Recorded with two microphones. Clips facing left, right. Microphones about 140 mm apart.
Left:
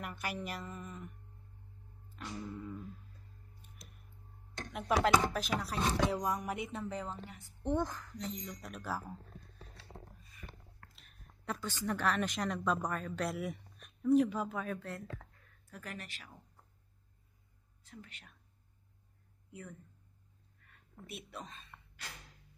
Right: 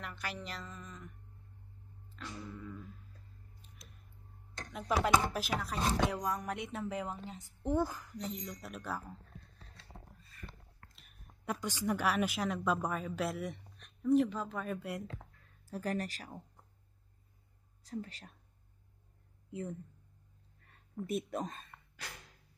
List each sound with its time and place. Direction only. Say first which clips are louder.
0.0 s a sound: left 2 dB; 10° left (ahead or behind)
2.0 s music: left 2 dB; 15° left (ahead or behind)
5.0 s a woman's voice: even; 5° right (ahead or behind)
6.2 s a sound: left 1 dB; 15° left (ahead or behind)
6.5 s a woman's voice: right 1 dB; centre (ahead or behind)
11.0 s a woman's voice: even; 10° right (ahead or behind); by 14.6 s 5° left (ahead or behind)
14.6 s speech: right 1 dB; 10° right (ahead or behind)
15.6 s speech: right 11 dB; 30° right (ahead or behind)
17.8 s speech: right 11 dB; 35° right (ahead or behind)
19.5 s speech: right 8 dB; 25° right (ahead or behind)
20.6 s a sound: even; 35° right (ahead or behind)
21.1 s speech: right 10 dB; 40° right (ahead or behind)